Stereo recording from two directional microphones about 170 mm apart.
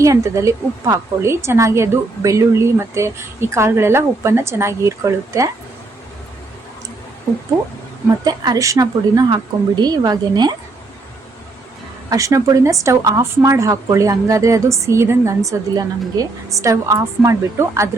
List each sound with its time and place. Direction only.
0.0 s a woman's voice: 20° right (ahead or behind)
8.2 s a woman's voice: 25° right (ahead or behind)
12.1 s a woman's voice: 20° right (ahead or behind)